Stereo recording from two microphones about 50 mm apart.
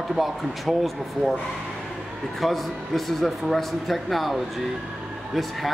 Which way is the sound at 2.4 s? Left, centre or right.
Centre.